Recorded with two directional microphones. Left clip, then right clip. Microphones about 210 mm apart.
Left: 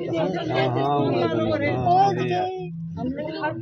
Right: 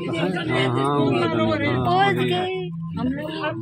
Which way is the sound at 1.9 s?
15° right (ahead or behind).